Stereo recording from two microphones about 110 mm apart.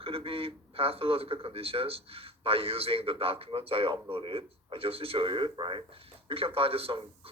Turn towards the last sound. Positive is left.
turn(degrees=-60)  # may be behind; listen again after turning